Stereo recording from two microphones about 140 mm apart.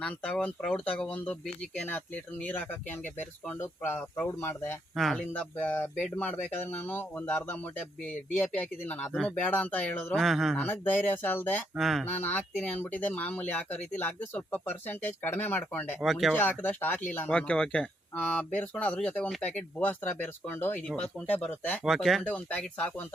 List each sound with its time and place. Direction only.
0.0 s speech: 10° left (ahead or behind)
4.9 s speech: 5° left (ahead or behind)
10.6 s speech: 15° left (ahead or behind)
11.8 s speech: centre (ahead or behind)
12.2 s speech: 10° left (ahead or behind)
16.0 s speech: centre (ahead or behind)
16.3 s speech: 15° left (ahead or behind)
21.8 s speech: centre (ahead or behind)